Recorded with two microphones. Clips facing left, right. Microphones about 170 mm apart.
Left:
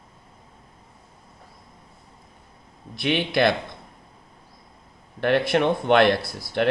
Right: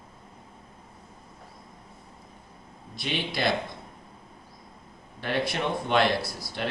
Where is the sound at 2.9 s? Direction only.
60° left (ahead or behind).